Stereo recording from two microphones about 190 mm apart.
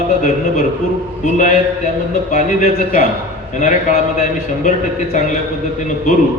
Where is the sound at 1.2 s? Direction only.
40° left (ahead or behind).